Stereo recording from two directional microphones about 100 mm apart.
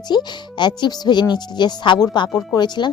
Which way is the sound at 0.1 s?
45° left (ahead or behind).